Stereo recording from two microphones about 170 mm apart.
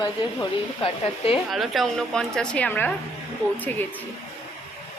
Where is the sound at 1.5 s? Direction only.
Centre (ahead or behind).